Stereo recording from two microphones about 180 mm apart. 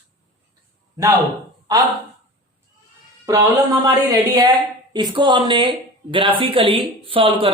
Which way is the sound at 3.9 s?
20° right (ahead or behind).